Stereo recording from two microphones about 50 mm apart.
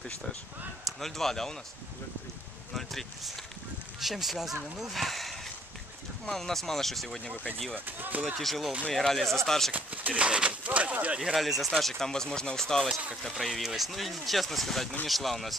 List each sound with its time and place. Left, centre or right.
0.8 s speech: centre
2.7 s speech: centre
7.7 s speech: right
8.4 s speech: centre
9.7 s speech: right
11.3 s speech: centre
13.3 s speech: centre